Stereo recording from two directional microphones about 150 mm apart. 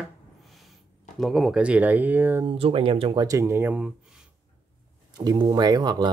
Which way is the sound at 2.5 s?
40° right (ahead or behind).